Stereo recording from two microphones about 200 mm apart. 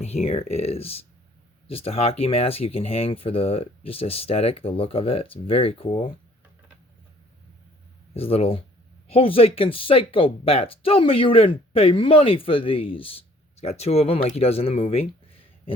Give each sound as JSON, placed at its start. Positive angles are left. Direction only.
{"t": 0.0, "sound": "speech", "side_deg": 30}
{"t": 8.1, "sound": "speech", "side_deg": 30}